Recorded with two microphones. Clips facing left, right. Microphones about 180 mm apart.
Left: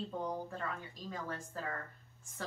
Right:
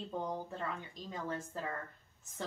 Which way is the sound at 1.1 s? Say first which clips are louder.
Right 3 dB; 20° right (ahead or behind).